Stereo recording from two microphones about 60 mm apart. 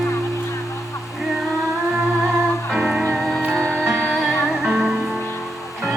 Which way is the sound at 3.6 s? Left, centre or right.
Left.